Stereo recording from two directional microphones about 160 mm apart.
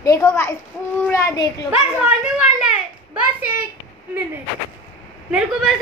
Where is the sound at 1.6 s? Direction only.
10° right (ahead or behind).